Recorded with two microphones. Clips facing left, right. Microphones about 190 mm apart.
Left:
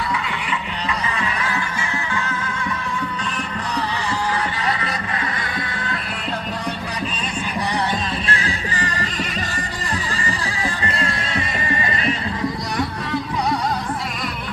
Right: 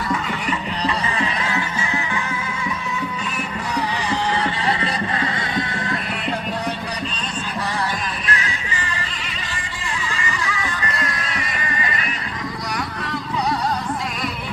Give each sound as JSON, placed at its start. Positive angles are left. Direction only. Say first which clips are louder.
{"t": 0.9, "sound": "music", "louder": "right 2 dB", "side_deg": -25}
{"t": 4.8, "sound": "music", "louder": "right 3 dB", "side_deg": -25}
{"t": 8.3, "sound": "music", "louder": "left 2 dB", "side_deg": 30}
{"t": 10.2, "sound": "music", "louder": "left 1 dB", "side_deg": 35}